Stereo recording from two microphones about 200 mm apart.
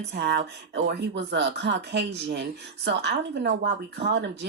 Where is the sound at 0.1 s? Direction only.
55° right (ahead or behind).